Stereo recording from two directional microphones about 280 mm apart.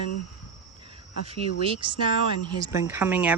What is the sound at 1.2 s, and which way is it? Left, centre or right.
Speech, centre.